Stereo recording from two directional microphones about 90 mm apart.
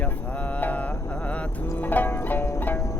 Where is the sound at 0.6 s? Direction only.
20° left (ahead or behind).